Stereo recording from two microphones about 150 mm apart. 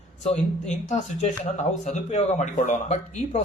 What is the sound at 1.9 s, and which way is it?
Speech, 50° left (ahead or behind).